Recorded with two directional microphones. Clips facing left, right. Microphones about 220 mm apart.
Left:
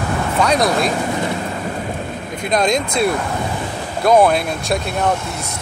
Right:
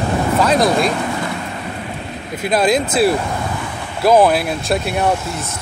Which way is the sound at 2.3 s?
5° right (ahead or behind).